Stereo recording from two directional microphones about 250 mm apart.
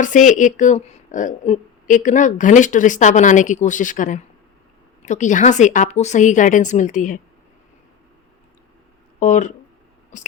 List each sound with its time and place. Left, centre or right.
0.0 s a woman's voice: left
9.2 s a woman's voice: left